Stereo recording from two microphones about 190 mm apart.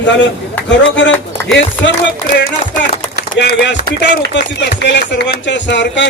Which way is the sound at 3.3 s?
65° left (ahead or behind).